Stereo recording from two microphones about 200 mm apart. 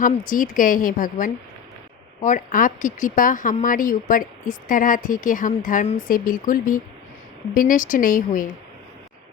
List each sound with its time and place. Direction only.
0.0 s speech: 40° left (ahead or behind)